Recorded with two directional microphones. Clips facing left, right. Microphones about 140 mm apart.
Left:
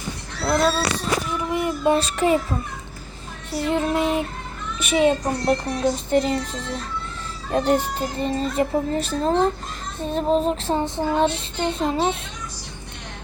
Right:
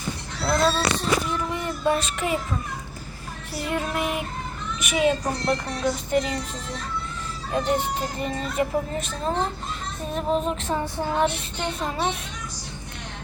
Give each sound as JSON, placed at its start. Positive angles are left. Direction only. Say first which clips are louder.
{"t": 0.4, "sound": "speech", "louder": "left 2 dB", "side_deg": 5}
{"t": 1.4, "sound": "a sound", "louder": "left 4 dB", "side_deg": 15}
{"t": 2.0, "sound": "a child's voice", "louder": "left 7 dB", "side_deg": 35}
{"t": 3.7, "sound": "child singing", "louder": "left 5 dB", "side_deg": 25}
{"t": 4.8, "sound": "a child's voice", "louder": "left 4 dB", "side_deg": 30}
{"t": 7.5, "sound": "speech", "louder": "left 4 dB", "side_deg": 45}
{"t": 7.9, "sound": "a child's voice", "louder": "left 4 dB", "side_deg": 30}
{"t": 10.0, "sound": "child singing", "louder": "left 5 dB", "side_deg": 30}